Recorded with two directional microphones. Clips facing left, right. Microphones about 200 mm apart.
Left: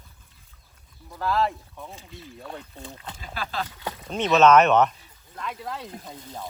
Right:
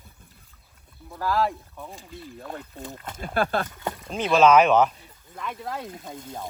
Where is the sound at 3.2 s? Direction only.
55° right (ahead or behind).